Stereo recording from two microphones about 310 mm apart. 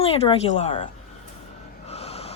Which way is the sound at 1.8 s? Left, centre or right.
Centre.